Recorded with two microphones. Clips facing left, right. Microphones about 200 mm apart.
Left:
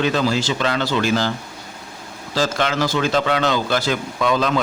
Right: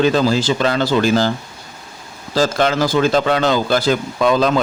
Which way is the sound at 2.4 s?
40° right (ahead or behind).